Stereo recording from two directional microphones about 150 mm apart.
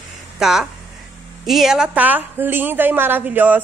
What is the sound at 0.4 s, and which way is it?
A woman's voice, 5° right (ahead or behind).